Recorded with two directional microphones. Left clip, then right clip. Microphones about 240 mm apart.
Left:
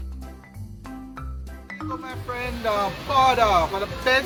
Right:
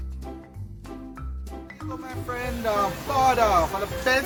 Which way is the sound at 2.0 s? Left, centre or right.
Centre.